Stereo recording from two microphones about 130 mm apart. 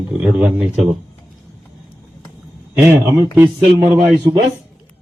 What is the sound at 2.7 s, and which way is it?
Speech, 20° right (ahead or behind).